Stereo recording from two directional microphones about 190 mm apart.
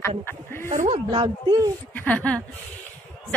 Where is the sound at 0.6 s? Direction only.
40° right (ahead or behind).